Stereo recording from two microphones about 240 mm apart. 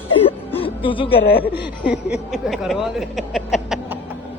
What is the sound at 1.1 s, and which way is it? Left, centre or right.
Speech, left.